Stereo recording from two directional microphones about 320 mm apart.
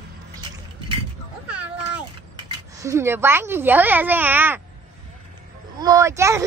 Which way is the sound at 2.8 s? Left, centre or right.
Centre.